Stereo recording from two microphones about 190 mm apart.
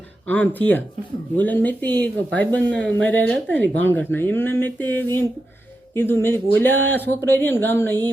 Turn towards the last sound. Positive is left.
turn(degrees=10)  # may be behind; listen again after turning